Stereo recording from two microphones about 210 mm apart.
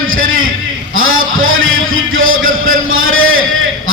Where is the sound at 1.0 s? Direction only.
70° right (ahead or behind).